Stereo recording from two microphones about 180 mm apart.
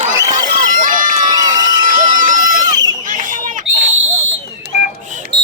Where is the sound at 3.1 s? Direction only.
45° right (ahead or behind).